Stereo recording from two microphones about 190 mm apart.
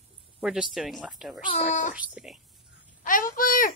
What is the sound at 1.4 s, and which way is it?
Speech, 35° left (ahead or behind).